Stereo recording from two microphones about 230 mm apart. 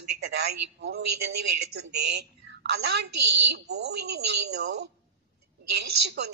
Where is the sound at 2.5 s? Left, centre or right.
Right.